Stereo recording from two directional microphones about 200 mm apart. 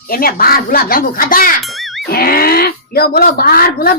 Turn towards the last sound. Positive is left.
turn(degrees=50)  # may be behind; listen again after turning